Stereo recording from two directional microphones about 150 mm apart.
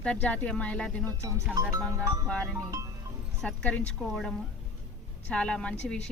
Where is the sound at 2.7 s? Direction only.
20° right (ahead or behind).